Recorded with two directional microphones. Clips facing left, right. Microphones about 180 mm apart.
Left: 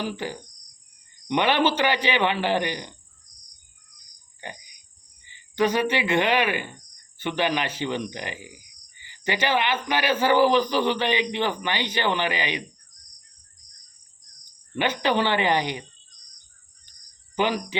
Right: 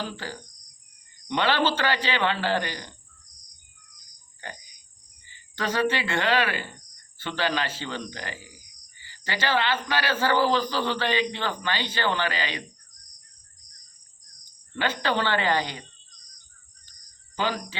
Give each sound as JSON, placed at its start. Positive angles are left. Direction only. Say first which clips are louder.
{"t": 0.0, "sound": "speech", "louder": "left 4 dB", "side_deg": 15}
{"t": 4.4, "sound": "a sound", "louder": "left 2 dB", "side_deg": 15}
{"t": 5.3, "sound": "speech", "louder": "left 6 dB", "side_deg": 15}
{"t": 14.8, "sound": "speech", "louder": "left 3 dB", "side_deg": 15}
{"t": 17.3, "sound": "speech", "louder": "left 4 dB", "side_deg": 20}